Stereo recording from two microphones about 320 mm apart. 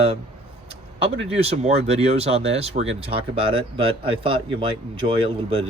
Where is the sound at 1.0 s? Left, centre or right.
Centre.